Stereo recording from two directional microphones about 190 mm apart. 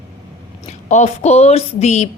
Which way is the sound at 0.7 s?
35° left (ahead or behind).